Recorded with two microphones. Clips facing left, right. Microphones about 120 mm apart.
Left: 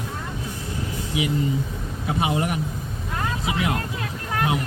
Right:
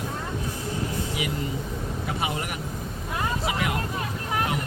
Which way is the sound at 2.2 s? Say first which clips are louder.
Left 8 dB; 25° left (ahead or behind).